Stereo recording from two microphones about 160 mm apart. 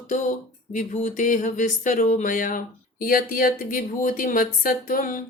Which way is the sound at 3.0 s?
60° left (ahead or behind).